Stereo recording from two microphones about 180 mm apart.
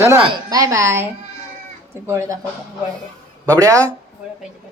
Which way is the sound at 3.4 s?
20° right (ahead or behind).